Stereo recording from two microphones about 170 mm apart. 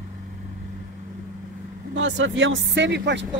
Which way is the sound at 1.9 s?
90° right.